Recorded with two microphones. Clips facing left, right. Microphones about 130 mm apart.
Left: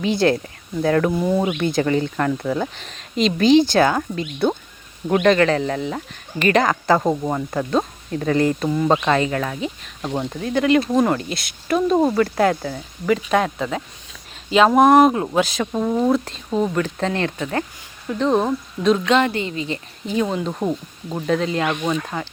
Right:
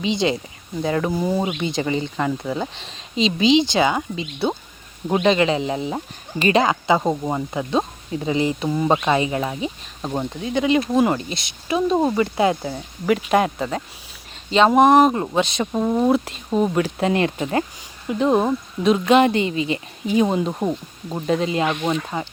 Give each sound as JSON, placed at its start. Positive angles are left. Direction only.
{"t": 0.2, "sound": "speech", "side_deg": 0}
{"t": 3.8, "sound": "speech", "side_deg": -10}
{"t": 6.8, "sound": "speech", "side_deg": 0}
{"t": 10.1, "sound": "speech", "side_deg": -5}
{"t": 12.1, "sound": "speech", "side_deg": -10}
{"t": 19.2, "sound": "speech", "side_deg": -20}